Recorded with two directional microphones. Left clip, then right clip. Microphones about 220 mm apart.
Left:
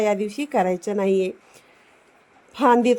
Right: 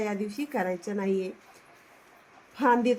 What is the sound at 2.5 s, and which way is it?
Speech, 40° left (ahead or behind).